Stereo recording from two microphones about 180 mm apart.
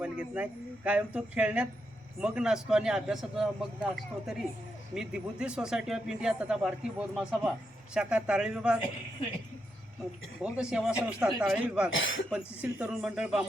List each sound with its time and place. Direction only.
0.0 s speech: 5° right (ahead or behind)
10.4 s speech: 5° right (ahead or behind)
11.9 s speech: 90° left
12.6 s speech: 5° right (ahead or behind)